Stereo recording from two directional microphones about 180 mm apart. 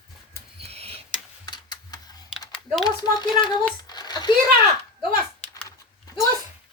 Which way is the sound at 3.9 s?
25° left (ahead or behind).